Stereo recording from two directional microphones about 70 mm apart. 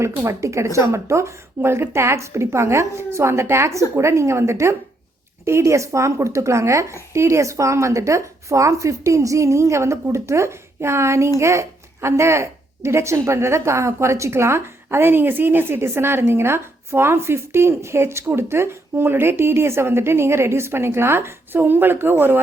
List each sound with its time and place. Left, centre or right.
0.3 s a woman's voice: right